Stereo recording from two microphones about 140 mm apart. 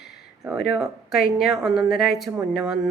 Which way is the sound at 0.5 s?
5° right (ahead or behind).